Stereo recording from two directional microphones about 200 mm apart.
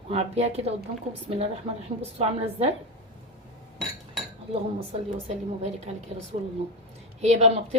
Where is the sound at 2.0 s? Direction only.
30° right (ahead or behind).